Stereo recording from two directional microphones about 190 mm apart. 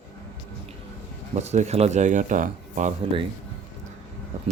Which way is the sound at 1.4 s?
35° right (ahead or behind).